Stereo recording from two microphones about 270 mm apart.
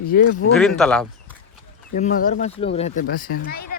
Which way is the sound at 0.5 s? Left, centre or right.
Centre.